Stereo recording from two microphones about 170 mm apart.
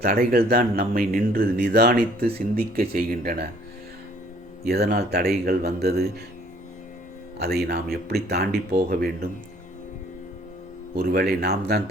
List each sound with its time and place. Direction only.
0.0 s speech: 65° right (ahead or behind)
4.6 s speech: 65° right (ahead or behind)
7.3 s speech: 70° right (ahead or behind)
10.9 s speech: 65° right (ahead or behind)